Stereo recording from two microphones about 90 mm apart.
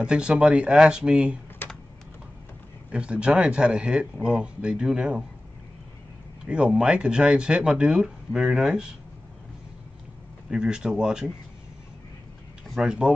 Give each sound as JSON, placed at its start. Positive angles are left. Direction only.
{"t": 0.0, "sound": "speech", "side_deg": -10}
{"t": 1.6, "sound": "typing", "side_deg": 20}
{"t": 2.9, "sound": "speech", "side_deg": -15}
{"t": 6.4, "sound": "speech", "side_deg": -10}
{"t": 10.5, "sound": "speech", "side_deg": -10}
{"t": 12.6, "sound": "speech", "side_deg": -5}